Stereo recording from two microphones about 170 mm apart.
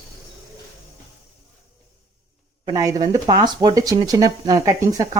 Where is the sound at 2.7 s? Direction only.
20° right (ahead or behind).